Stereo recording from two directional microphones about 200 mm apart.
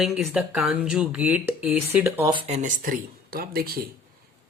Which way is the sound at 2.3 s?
35° right (ahead or behind).